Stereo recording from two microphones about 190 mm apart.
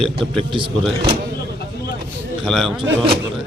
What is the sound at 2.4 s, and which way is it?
Speech, centre (ahead or behind).